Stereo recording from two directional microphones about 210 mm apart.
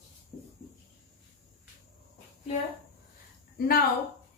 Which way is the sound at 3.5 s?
45° left (ahead or behind).